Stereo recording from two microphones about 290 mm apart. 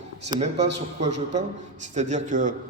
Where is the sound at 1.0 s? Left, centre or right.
Right.